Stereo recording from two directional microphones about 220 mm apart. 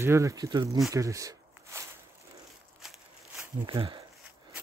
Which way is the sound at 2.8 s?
Centre (ahead or behind).